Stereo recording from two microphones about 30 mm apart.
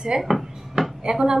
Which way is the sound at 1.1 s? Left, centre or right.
Right.